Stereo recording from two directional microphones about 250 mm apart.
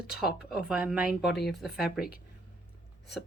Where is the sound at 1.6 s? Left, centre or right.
Centre.